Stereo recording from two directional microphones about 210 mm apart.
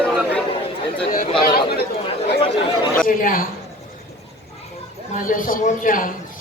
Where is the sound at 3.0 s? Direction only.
40° left (ahead or behind).